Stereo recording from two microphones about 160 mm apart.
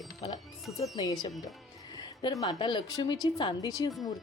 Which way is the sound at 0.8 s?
25° left (ahead or behind).